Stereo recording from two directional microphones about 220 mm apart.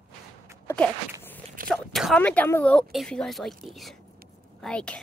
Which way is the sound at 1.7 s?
Centre (ahead or behind).